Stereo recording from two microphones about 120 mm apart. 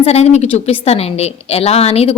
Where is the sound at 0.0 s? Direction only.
60° left (ahead or behind).